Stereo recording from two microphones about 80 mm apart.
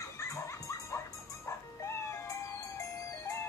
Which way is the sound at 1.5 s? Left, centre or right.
Left.